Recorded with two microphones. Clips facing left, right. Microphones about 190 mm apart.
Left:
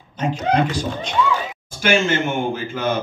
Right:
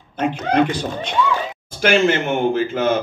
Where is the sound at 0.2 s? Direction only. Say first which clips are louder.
Right 2 dB; 60° right (ahead or behind).